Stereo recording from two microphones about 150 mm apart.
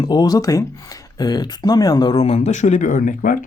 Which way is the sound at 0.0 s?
30° left (ahead or behind).